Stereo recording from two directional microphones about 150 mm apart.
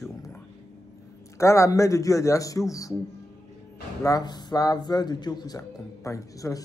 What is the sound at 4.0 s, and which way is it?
Speech, 25° left (ahead or behind).